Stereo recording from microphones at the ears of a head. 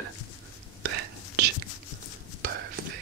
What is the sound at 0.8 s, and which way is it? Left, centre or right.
Whispering, right.